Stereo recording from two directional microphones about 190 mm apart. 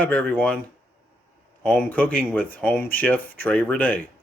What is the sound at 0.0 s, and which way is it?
Speech, 5° left (ahead or behind).